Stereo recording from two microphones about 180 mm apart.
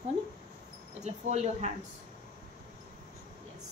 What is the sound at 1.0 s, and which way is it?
Speech, 40° right (ahead or behind).